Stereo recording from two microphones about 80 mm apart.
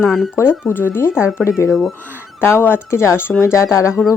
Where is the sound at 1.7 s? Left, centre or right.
Centre.